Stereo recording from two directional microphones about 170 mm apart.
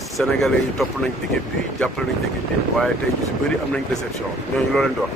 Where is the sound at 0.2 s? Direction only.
Centre (ahead or behind).